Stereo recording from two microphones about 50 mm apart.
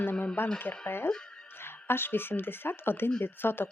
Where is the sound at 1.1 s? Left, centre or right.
Centre.